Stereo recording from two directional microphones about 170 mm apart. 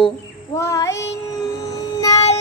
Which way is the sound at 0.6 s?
15° left (ahead or behind).